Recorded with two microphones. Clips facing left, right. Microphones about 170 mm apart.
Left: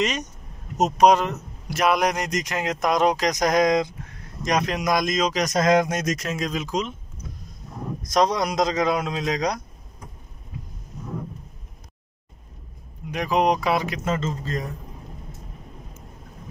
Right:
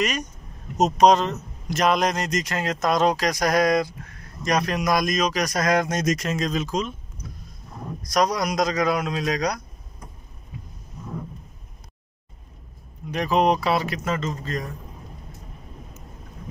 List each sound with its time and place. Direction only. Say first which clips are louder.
0.0 s a man's voice: left 1 dB; 25° left (ahead or behind)
0.7 s a man's voice: even; 10° left (ahead or behind)
5.9 s speech: right 2 dB; 5° left (ahead or behind)
8.0 s a man's voice: left 1 dB; 25° left (ahead or behind)
13.1 s speech: right 1 dB; 15° left (ahead or behind)